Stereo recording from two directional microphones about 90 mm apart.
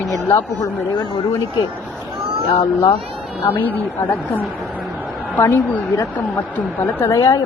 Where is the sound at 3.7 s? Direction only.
20° left (ahead or behind).